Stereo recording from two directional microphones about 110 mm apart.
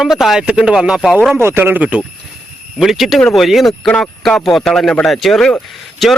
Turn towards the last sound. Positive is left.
turn(degrees=5)  # may be behind; listen again after turning